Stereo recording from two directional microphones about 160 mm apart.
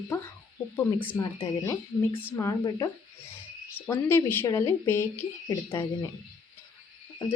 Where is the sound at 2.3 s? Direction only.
20° left (ahead or behind).